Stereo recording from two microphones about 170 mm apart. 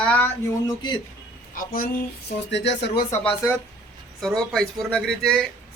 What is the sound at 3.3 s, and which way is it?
Speech, 20° left (ahead or behind).